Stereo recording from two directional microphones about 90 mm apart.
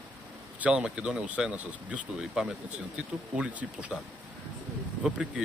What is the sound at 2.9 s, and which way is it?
Speech, 15° right (ahead or behind).